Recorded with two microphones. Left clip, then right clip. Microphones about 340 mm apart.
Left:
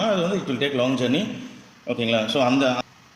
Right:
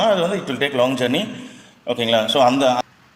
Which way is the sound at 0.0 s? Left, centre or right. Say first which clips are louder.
Right 5 dB; centre.